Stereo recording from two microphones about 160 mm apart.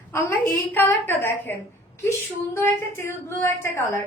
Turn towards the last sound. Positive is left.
turn(degrees=15)  # may be behind; listen again after turning